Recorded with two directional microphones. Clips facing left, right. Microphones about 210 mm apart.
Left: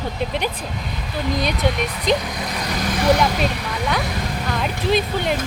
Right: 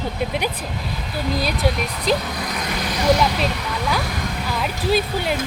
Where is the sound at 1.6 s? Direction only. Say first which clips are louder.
Left 1 dB; 5° right (ahead or behind).